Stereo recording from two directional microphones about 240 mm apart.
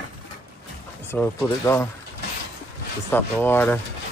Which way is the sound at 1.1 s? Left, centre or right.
Centre.